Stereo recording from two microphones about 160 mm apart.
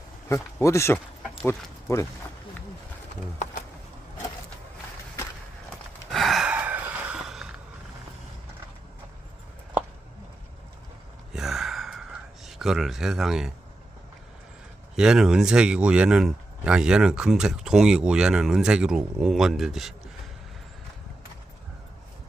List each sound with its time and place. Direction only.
0.3 s speech: 20° left (ahead or behind)
6.1 s gasp: centre (ahead or behind)
11.3 s gasp: centre (ahead or behind)
14.9 s speech: 5° right (ahead or behind)